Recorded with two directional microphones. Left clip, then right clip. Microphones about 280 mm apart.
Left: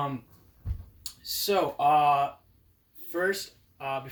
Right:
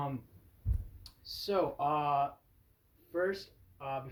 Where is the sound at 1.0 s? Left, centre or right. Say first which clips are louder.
Left 11 dB; left.